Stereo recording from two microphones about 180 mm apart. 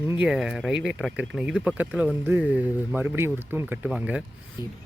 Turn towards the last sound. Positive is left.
turn(degrees=-5)  # may be behind; listen again after turning